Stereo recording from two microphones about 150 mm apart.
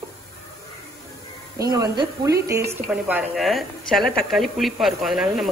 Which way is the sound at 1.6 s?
25° right (ahead or behind).